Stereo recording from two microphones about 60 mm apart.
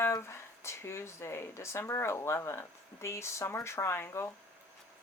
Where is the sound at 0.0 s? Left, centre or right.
Left.